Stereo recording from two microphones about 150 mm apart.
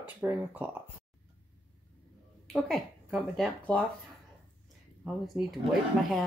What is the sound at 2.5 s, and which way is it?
Speech, centre (ahead or behind).